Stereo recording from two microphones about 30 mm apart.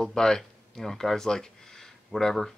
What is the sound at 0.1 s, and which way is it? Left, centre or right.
Speech, left.